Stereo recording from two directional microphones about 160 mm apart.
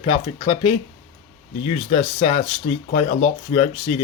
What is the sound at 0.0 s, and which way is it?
Speech, 40° left (ahead or behind).